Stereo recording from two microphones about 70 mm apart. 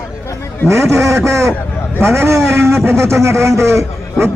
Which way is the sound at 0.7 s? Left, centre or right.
Right.